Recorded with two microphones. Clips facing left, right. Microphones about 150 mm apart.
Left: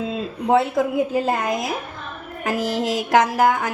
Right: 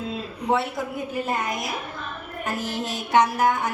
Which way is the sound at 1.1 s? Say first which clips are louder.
Left 6 dB; 90° left.